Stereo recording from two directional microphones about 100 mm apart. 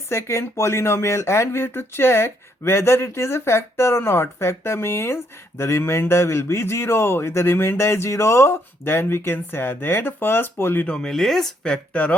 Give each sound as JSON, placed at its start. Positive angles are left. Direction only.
{"t": 0.1, "sound": "speech", "side_deg": 30}
{"t": 10.9, "sound": "speech", "side_deg": 5}